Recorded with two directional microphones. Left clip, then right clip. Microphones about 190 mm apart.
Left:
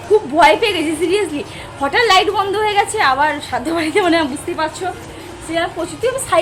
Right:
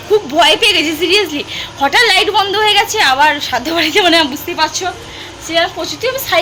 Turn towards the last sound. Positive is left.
turn(degrees=10)  # may be behind; listen again after turning